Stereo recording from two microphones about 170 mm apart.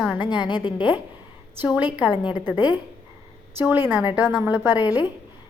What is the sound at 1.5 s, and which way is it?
Speech, 5° right (ahead or behind).